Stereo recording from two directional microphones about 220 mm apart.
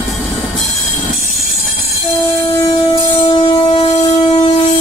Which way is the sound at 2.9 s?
20° left (ahead or behind).